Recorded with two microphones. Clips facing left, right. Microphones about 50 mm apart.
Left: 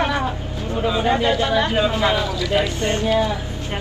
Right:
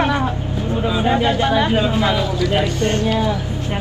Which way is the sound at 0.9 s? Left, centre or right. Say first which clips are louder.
Right 2 dB; centre.